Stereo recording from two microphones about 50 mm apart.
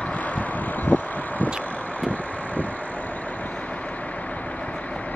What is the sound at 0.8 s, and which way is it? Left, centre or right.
Vehicle, left.